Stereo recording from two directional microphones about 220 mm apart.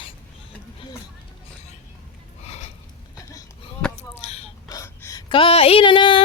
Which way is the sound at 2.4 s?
30° left (ahead or behind).